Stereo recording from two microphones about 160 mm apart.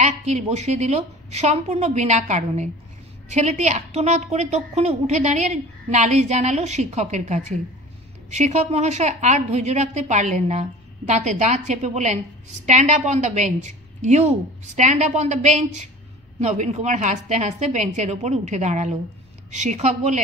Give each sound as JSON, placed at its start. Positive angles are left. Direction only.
{"t": 0.0, "sound": "a woman's voice", "side_deg": -45}